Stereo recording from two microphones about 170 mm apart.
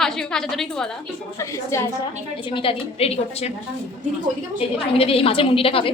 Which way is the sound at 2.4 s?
30° left (ahead or behind).